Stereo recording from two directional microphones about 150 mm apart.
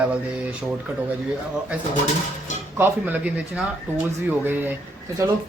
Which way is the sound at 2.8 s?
10° right (ahead or behind).